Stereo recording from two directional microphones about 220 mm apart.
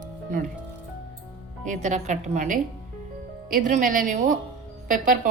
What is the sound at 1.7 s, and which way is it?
Speech, 30° right (ahead or behind).